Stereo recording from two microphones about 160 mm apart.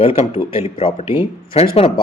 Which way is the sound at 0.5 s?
35° left (ahead or behind).